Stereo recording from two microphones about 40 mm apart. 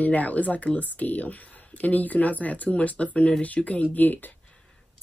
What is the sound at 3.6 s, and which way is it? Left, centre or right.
Speech, centre.